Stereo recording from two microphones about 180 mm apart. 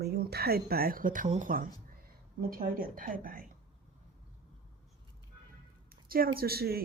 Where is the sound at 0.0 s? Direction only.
65° right (ahead or behind).